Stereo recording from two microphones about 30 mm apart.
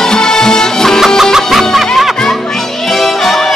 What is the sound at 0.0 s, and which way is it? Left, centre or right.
Music, centre.